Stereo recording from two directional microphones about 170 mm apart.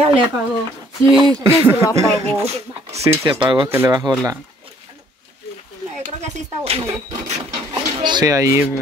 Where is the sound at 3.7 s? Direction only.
20° right (ahead or behind).